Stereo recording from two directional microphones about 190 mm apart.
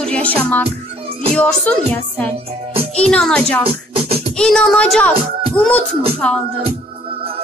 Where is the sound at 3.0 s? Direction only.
5° left (ahead or behind).